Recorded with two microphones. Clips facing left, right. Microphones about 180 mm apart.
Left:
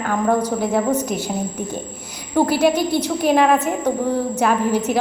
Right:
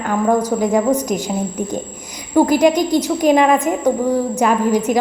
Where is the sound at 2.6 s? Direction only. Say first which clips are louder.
Right 3 dB; 15° right (ahead or behind).